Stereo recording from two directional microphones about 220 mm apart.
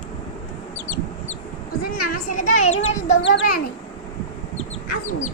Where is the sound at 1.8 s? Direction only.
45° left (ahead or behind).